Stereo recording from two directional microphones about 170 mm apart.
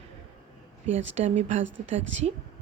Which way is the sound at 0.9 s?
35° right (ahead or behind).